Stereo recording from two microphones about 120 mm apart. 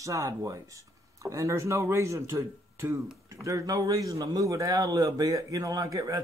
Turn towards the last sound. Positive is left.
turn(degrees=-30)  # may be behind; listen again after turning